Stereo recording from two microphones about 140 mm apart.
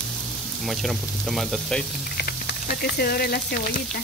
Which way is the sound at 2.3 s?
90° left.